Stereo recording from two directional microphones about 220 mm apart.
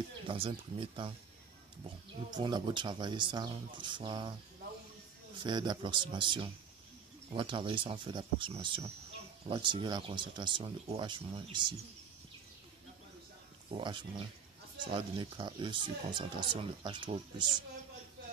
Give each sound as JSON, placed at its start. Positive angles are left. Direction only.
{"t": 0.3, "sound": "speech", "side_deg": -25}
{"t": 2.3, "sound": "speech", "side_deg": -20}
{"t": 5.4, "sound": "speech", "side_deg": -20}
{"t": 13.7, "sound": "speech", "side_deg": -20}